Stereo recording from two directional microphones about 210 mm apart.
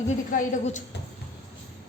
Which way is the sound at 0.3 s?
35° left (ahead or behind).